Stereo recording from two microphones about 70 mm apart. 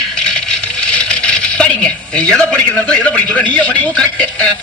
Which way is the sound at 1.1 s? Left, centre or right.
Centre.